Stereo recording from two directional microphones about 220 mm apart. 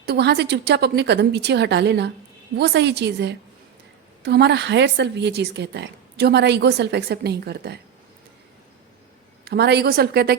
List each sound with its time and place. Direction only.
0.0 s a woman's voice: 50° right (ahead or behind)
9.4 s a woman's voice: 50° right (ahead or behind)